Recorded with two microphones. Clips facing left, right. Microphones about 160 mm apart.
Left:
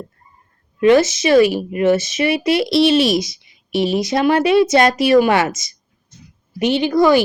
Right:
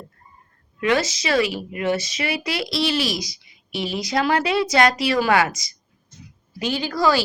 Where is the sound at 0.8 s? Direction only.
25° left (ahead or behind).